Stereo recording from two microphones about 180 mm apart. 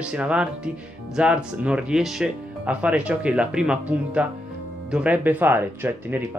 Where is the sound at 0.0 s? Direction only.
5° right (ahead or behind).